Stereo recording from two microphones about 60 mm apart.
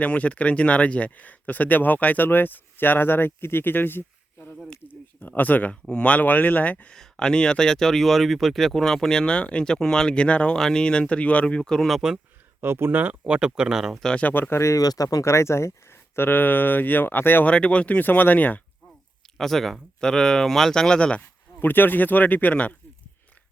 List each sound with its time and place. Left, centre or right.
0.0 s speech: left
4.9 s a sound: left
5.9 s speech: left
6.9 s speech: centre
11.9 s speech: centre
12.6 s speech: right; by 14.0 s centre
14.2 s speech: left
14.5 s speech: left
14.8 s speech: left
15.2 s speech: left
17.4 s speech: left
19.4 s speech: centre
21.6 s speech: left